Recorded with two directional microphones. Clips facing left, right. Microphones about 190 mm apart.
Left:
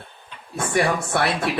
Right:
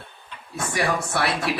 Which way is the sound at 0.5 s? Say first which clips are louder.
Left 3 dB; 55° left (ahead or behind).